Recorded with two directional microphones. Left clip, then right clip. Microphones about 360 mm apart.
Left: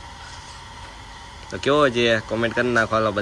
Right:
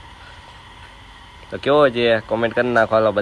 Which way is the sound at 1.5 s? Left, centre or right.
Centre.